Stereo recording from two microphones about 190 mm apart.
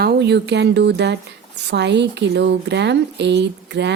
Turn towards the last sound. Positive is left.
turn(degrees=-65)  # may be behind; listen again after turning